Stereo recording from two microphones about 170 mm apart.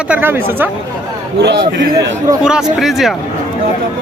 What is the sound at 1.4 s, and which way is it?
Speech, 80° right.